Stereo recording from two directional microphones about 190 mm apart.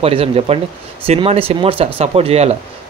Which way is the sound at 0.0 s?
30° right (ahead or behind).